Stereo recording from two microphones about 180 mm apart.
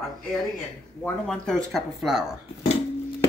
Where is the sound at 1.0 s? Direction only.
5° left (ahead or behind).